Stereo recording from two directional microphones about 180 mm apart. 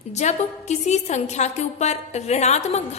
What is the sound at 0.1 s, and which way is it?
A woman's voice, 40° left (ahead or behind).